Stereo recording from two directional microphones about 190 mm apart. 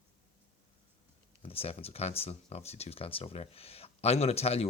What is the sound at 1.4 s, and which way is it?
Speech, 30° left (ahead or behind).